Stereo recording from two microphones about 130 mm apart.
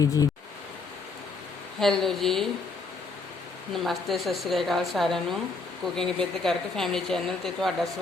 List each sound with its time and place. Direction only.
0.0 s speech: 25° left (ahead or behind)
1.8 s a woman's voice: 5° left (ahead or behind)
3.8 s a woman's voice: centre (ahead or behind)